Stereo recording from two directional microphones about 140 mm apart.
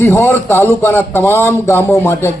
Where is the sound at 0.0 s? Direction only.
20° left (ahead or behind).